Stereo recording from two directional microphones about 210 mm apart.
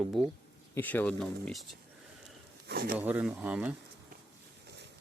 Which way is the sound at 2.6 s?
45° right (ahead or behind).